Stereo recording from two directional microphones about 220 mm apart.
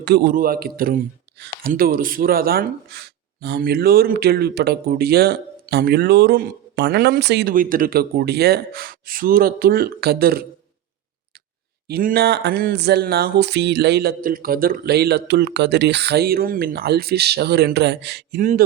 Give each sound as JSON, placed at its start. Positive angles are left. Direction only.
{"t": 0.0, "sound": "a man's voice", "side_deg": -50}
{"t": 11.9, "sound": "a man's voice", "side_deg": -45}